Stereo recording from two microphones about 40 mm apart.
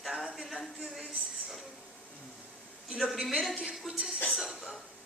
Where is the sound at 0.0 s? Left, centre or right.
Centre.